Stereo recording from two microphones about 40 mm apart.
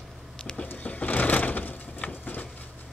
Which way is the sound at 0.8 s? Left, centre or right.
Left.